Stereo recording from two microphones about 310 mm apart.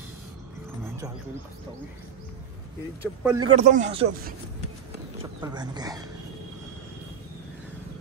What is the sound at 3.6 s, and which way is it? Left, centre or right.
Speech, right.